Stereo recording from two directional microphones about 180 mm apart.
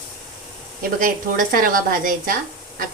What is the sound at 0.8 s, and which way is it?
A woman's voice, 50° right (ahead or behind).